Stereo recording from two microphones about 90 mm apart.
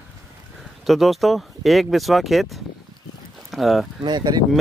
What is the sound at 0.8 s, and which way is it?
Speech, centre (ahead or behind).